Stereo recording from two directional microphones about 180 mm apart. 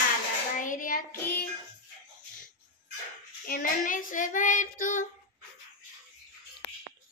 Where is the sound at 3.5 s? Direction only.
50° left (ahead or behind).